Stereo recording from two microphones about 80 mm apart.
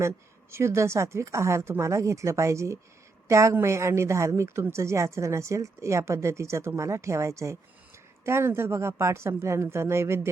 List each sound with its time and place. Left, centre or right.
0.5 s a woman's voice: right